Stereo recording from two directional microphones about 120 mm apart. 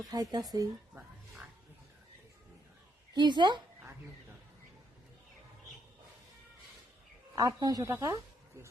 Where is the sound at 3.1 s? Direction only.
40° right (ahead or behind).